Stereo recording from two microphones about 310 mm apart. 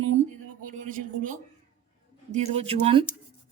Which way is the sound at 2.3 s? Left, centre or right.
Centre.